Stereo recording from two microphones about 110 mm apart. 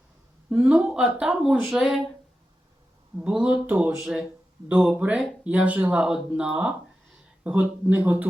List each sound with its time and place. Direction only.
0.5 s speech: 10° right (ahead or behind)
3.2 s speech: 10° right (ahead or behind)